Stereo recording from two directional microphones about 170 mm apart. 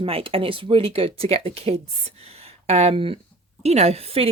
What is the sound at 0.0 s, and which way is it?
A woman's voice, 30° right (ahead or behind).